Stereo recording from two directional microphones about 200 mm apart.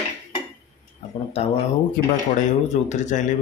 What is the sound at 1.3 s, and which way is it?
Speech, 30° left (ahead or behind).